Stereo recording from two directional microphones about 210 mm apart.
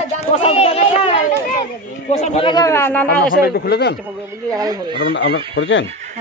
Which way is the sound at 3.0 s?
45° left (ahead or behind).